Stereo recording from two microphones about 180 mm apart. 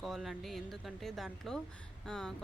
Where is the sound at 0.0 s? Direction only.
Centre (ahead or behind).